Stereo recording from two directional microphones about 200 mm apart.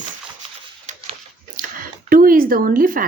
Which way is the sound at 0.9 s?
35° right (ahead or behind).